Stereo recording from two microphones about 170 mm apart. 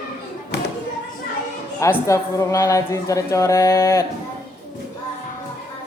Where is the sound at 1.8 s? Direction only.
15° left (ahead or behind).